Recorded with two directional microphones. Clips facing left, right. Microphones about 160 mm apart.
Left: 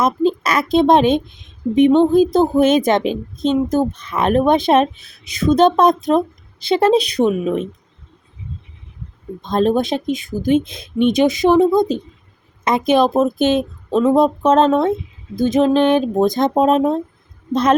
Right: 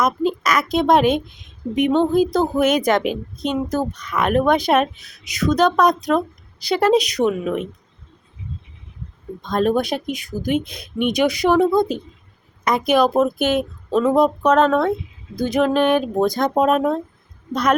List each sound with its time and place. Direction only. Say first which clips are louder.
0.0 s speech: left 3 dB; 30° left (ahead or behind)
9.4 s speech: left 2 dB; 25° left (ahead or behind)